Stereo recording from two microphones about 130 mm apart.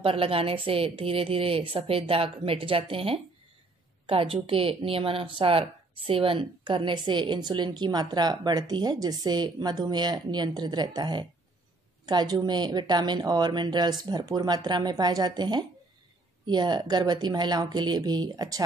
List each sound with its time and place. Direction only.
0.0 s a woman's voice: 45° right (ahead or behind); by 18.6 s 30° right (ahead or behind)